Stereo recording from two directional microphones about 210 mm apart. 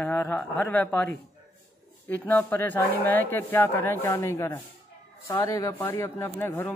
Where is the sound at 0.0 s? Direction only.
10° left (ahead or behind).